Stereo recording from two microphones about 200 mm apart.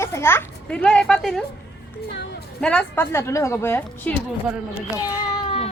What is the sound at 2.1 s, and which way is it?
Music, 60° left (ahead or behind).